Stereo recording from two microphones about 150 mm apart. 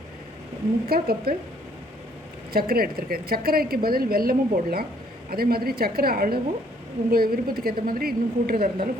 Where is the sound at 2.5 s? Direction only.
90° right.